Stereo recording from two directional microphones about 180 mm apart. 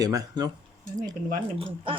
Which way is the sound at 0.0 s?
20° right (ahead or behind).